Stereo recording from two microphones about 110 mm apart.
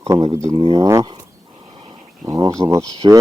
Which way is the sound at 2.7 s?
30° right (ahead or behind).